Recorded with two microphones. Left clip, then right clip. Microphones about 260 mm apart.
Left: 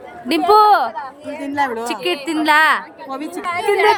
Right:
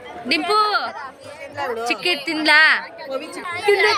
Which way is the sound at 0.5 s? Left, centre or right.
Centre.